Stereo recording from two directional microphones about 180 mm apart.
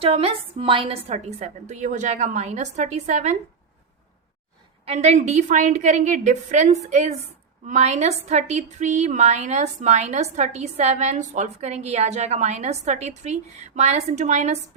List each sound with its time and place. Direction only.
0.0 s a woman's voice: 35° right (ahead or behind)
4.9 s a woman's voice: 35° right (ahead or behind)